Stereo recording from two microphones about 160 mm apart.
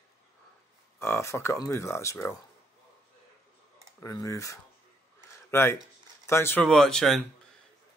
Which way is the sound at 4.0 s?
20° left (ahead or behind).